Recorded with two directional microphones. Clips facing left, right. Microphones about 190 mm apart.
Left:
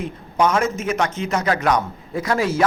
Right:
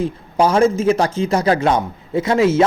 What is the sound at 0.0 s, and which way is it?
A man's voice, 30° right (ahead or behind).